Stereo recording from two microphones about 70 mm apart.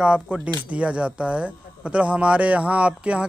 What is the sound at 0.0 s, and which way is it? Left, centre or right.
Speech, centre.